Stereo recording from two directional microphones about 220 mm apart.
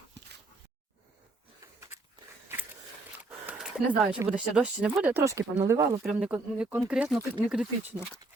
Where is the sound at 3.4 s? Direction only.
5° right (ahead or behind).